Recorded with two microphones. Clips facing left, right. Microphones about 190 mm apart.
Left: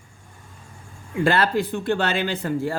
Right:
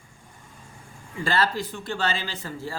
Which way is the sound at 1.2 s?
55° left (ahead or behind).